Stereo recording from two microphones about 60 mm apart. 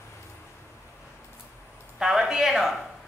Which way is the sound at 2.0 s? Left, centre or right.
Centre.